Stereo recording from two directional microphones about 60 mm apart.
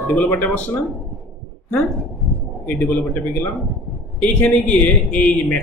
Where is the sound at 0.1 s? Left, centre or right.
Left.